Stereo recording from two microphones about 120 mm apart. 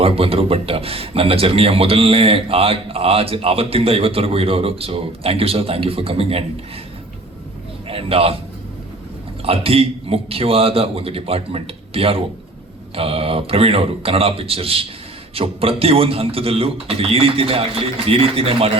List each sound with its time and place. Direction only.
0.0 s a man's voice: 50° right (ahead or behind)
7.9 s a man's voice: 50° right (ahead or behind)
9.4 s a man's voice: 55° right (ahead or behind)